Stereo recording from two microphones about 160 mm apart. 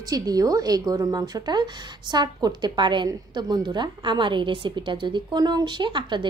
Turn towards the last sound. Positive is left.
turn(degrees=-30)  # may be behind; listen again after turning